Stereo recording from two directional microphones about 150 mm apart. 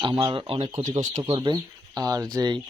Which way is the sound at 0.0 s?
30° right (ahead or behind).